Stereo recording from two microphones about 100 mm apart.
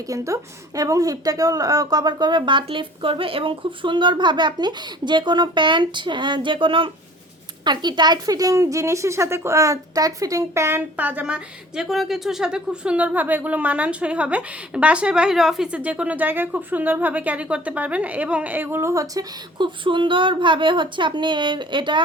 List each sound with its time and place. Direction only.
0.8 s speech: 35° right (ahead or behind); by 6.9 s 55° right (ahead or behind)
7.6 s speech: 45° right (ahead or behind); by 11.3 s 15° right (ahead or behind)
11.8 s speech: 5° right (ahead or behind); by 19.2 s 30° right (ahead or behind)
19.5 s speech: 55° right (ahead or behind)